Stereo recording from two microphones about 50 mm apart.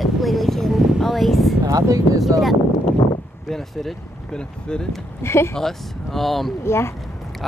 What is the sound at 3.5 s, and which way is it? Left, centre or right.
Speech, centre.